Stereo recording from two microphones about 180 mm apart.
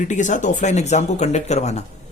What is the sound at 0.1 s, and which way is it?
Speech, 45° left (ahead or behind).